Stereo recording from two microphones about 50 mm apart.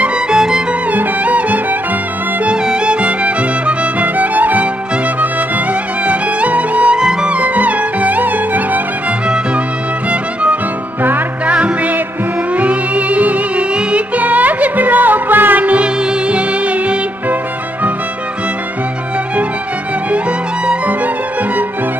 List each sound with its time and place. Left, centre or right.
0.0 s music: centre
0.9 s music: right
2.4 s music: centre
7.0 s music: centre; by 8.8 s right
10.0 s music: right
11.0 s music: right
11.4 s music: right
20.1 s music: right